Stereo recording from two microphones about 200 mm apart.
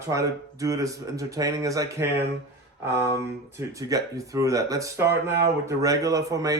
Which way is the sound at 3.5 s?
15° right (ahead or behind).